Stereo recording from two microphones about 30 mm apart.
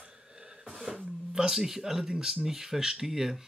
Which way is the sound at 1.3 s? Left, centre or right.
Centre.